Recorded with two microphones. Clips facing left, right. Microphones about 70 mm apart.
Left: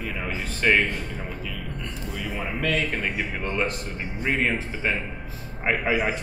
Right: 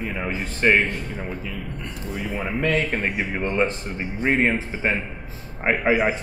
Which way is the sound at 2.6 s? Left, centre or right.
Right.